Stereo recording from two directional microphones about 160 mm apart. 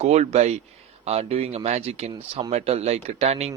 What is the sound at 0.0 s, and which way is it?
Speech, 40° right (ahead or behind).